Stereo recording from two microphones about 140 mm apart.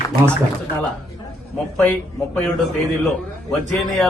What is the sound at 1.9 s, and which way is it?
Speech, 10° left (ahead or behind).